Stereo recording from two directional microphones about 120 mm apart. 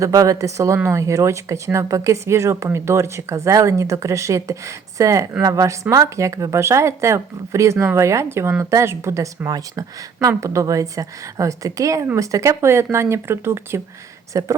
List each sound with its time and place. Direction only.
0.0 s speech: 30° right (ahead or behind)